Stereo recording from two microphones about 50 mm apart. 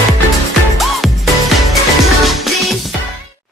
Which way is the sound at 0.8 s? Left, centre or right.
Centre.